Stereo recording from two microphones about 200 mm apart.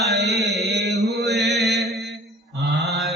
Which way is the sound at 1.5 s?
Centre (ahead or behind).